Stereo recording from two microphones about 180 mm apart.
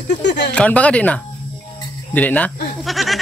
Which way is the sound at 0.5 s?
5° left (ahead or behind).